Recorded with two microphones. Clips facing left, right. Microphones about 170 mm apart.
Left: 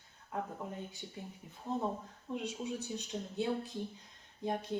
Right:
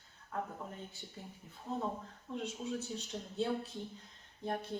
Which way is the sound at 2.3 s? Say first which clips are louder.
Even; 15° left (ahead or behind).